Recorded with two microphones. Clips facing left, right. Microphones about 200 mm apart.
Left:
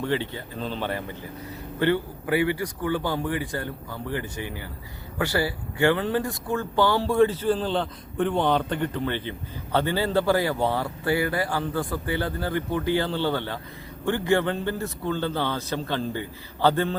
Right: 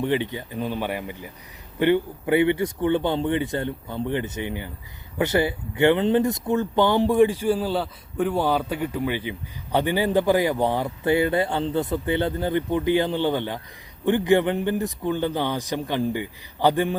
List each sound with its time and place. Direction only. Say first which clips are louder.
0.0 s speech: right 3 dB; 15° right (ahead or behind)